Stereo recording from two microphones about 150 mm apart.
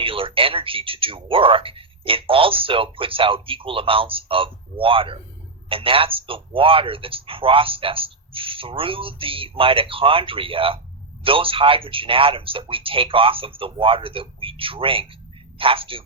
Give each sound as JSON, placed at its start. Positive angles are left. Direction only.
{"t": 0.0, "sound": "speech", "side_deg": -35}